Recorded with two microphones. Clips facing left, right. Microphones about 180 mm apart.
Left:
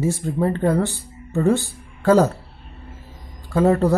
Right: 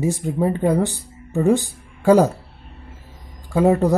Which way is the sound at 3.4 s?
15° right (ahead or behind).